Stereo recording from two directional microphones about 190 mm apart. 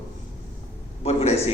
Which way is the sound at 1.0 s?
35° left (ahead or behind).